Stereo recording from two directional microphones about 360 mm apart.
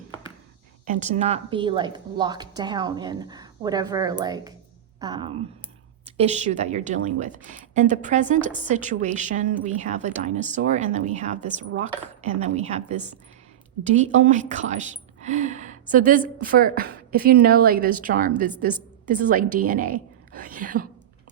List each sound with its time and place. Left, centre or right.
0.9 s a woman's voice: centre